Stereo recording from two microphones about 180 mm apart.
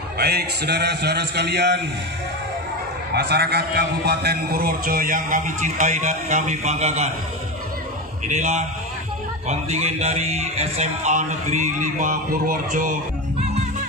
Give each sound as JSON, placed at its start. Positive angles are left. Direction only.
{"t": 0.2, "sound": "a man's voice", "side_deg": -60}
{"t": 3.2, "sound": "a man's voice", "side_deg": -60}
{"t": 8.3, "sound": "speech", "side_deg": -40}